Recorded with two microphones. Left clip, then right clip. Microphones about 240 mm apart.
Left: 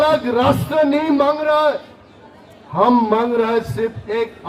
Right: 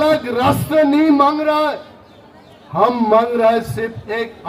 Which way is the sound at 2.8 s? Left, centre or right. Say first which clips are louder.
Right 1 dB; right.